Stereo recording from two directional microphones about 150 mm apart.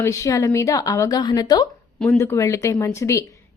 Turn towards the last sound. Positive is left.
turn(degrees=20)  # may be behind; listen again after turning